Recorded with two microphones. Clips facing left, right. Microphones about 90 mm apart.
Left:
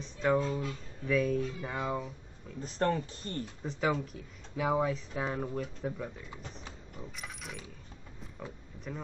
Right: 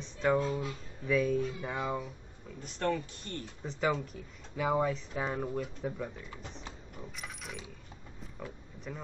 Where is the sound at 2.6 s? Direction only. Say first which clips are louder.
Left 2 dB; 40° left (ahead or behind).